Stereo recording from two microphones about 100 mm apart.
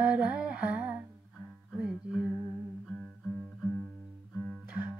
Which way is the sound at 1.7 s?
10° right (ahead or behind).